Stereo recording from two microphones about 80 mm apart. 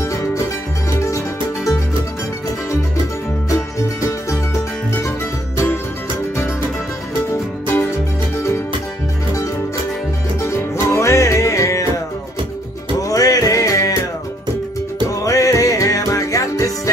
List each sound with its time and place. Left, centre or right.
0.0 s music: left
7.6 s music: left
10.4 s music: left
13.1 s music: left
15.0 s music: left